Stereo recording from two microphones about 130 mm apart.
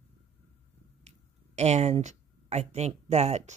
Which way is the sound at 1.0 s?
60° right (ahead or behind).